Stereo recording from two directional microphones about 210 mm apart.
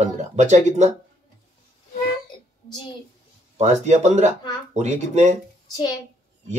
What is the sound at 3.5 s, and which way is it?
Speech, 35° right (ahead or behind).